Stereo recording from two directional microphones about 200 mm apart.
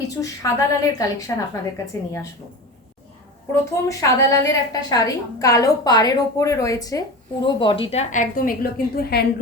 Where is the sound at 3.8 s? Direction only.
15° left (ahead or behind).